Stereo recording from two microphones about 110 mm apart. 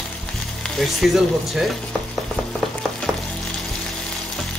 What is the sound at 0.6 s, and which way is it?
Speech, centre (ahead or behind).